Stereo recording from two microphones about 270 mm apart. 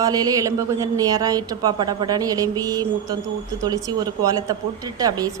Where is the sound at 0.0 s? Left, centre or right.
Centre.